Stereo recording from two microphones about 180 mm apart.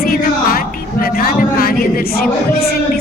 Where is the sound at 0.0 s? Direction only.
55° left (ahead or behind).